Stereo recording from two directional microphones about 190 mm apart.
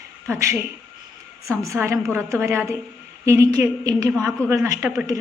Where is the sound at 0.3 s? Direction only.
15° right (ahead or behind).